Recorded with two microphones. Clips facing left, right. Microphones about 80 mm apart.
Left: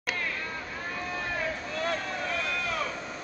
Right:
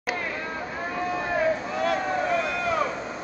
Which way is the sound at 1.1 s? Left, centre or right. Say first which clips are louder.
Right 9 dB; right.